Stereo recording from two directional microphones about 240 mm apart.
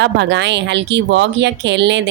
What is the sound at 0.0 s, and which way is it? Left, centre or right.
Speech, right.